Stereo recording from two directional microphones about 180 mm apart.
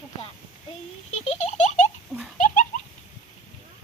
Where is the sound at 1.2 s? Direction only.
40° left (ahead or behind).